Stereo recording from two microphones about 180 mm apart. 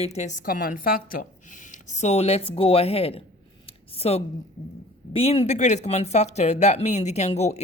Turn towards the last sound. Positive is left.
turn(degrees=40)  # may be behind; listen again after turning